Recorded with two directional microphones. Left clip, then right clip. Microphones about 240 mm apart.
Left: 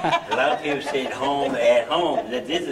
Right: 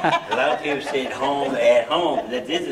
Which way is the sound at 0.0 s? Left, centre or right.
Centre.